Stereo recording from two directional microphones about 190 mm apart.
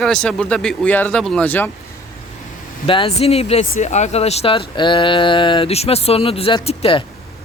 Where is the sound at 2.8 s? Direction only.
25° left (ahead or behind).